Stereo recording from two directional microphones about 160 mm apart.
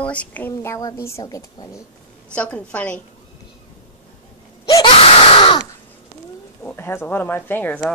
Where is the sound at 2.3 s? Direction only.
10° left (ahead or behind).